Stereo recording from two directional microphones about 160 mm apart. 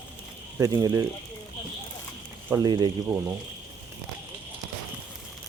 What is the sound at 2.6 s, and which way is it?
Speech, 25° right (ahead or behind).